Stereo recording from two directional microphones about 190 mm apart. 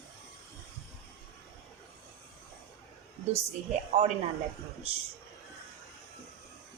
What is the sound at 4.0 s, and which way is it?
Speech, 35° right (ahead or behind).